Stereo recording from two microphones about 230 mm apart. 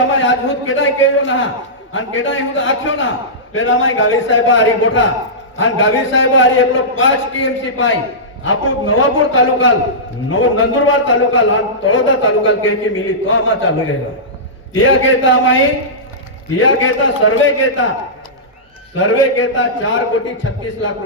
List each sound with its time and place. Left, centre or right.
0.1 s a man's voice: left
18.9 s a man's voice: left